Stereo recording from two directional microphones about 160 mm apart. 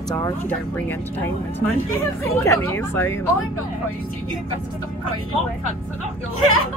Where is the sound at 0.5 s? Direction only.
10° left (ahead or behind).